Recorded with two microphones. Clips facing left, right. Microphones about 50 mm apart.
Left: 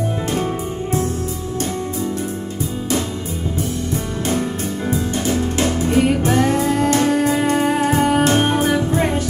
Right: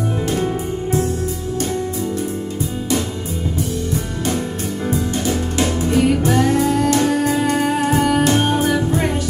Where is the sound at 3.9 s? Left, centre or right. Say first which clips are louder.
Even; left.